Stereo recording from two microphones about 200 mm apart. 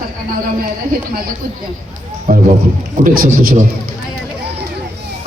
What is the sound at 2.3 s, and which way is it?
Run, 40° right (ahead or behind).